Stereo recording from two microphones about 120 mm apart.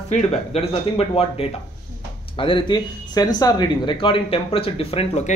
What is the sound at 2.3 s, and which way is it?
A man's voice, 45° left (ahead or behind).